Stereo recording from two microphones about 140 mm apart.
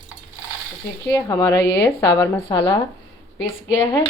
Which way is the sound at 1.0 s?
20° left (ahead or behind).